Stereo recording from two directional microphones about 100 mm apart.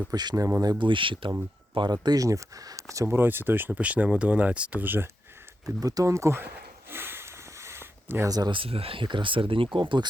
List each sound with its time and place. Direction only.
0.1 s speech: 40° right (ahead or behind)
0.8 s speech: 55° right (ahead or behind)
1.7 s speech: 45° right (ahead or behind); by 5.0 s 20° right (ahead or behind)
5.6 s speech: 35° right (ahead or behind)
6.9 s a sound: 20° right (ahead or behind)
8.3 s speech: 40° right (ahead or behind)
8.5 s speech: 70° right (ahead or behind)